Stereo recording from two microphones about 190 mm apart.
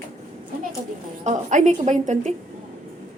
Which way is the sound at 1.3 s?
40° right (ahead or behind).